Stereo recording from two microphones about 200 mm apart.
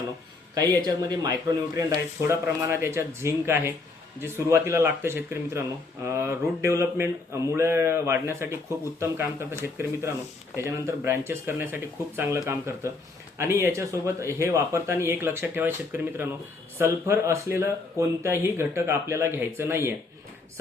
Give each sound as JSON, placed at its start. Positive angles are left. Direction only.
{"t": 0.5, "sound": "speech", "side_deg": -20}